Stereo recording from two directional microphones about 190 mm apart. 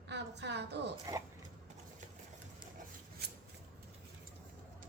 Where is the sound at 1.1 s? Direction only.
20° right (ahead or behind).